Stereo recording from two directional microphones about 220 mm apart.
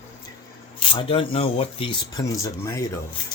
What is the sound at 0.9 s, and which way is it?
Speech, 25° left (ahead or behind).